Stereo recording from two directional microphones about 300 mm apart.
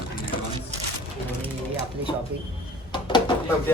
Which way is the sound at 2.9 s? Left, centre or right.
Centre.